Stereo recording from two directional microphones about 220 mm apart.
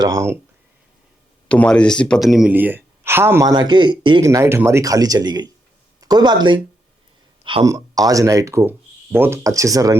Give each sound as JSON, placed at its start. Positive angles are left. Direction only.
{"t": 0.0, "sound": "speech", "side_deg": -15}
{"t": 1.5, "sound": "speech", "side_deg": 5}